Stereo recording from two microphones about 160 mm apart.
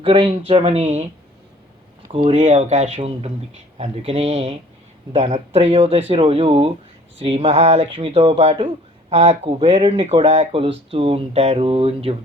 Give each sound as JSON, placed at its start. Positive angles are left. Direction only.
{"t": 0.0, "sound": "speech", "side_deg": -35}
{"t": 2.1, "sound": "speech", "side_deg": -40}